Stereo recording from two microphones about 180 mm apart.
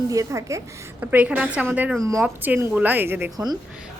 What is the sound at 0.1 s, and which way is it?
A woman's voice, 20° right (ahead or behind).